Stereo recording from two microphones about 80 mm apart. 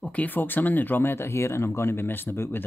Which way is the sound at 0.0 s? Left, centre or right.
Centre.